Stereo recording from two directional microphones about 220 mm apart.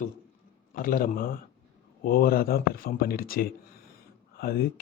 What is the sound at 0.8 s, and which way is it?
A man's voice, 40° left (ahead or behind).